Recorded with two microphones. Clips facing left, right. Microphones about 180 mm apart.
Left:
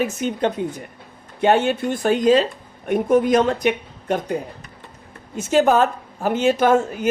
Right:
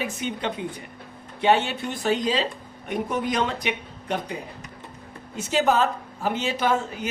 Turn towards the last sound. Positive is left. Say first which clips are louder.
# left 8 dB
turn(degrees=50)  # may be behind; listen again after turning